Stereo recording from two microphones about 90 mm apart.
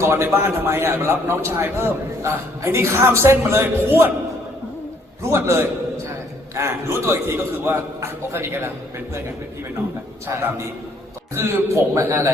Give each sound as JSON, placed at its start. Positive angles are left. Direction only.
{"t": 0.0, "sound": "a man's voice", "side_deg": -30}
{"t": 5.3, "sound": "a man's voice", "side_deg": -30}
{"t": 11.3, "sound": "a man's voice", "side_deg": -30}